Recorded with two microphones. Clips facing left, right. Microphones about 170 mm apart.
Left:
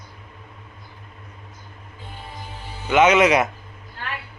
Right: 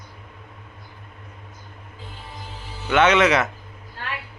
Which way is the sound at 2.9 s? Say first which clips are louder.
Left 2 dB; 10° left (ahead or behind).